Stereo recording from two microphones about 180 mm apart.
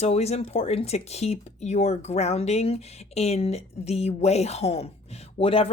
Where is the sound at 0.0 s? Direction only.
35° left (ahead or behind).